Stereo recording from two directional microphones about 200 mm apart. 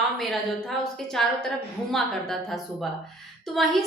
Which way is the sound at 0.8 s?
Centre (ahead or behind).